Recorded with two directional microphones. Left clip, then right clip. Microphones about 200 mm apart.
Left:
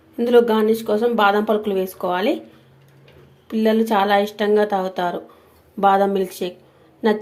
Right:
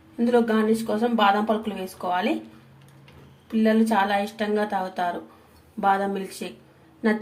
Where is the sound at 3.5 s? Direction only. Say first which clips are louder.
Left 4 dB; 40° left (ahead or behind).